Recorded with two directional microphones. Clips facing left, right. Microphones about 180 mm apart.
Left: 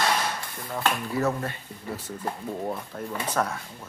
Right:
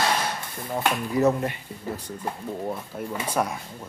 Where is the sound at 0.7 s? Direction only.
20° right (ahead or behind).